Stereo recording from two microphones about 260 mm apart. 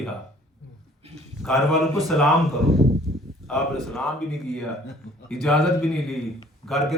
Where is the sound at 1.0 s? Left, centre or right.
Right.